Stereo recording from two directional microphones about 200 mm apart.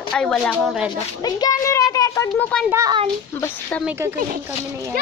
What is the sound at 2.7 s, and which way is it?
Speech, 15° right (ahead or behind).